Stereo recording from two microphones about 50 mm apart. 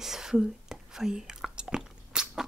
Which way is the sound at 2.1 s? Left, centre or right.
Centre.